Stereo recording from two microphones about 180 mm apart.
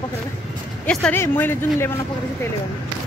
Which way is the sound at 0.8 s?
10° left (ahead or behind).